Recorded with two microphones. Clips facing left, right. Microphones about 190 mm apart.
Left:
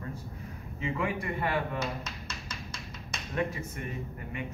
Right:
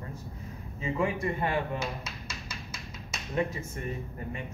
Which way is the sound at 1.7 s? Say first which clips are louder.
Left 1 dB; 10° right (ahead or behind).